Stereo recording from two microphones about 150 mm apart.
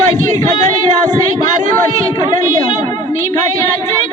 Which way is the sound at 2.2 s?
25° left (ahead or behind).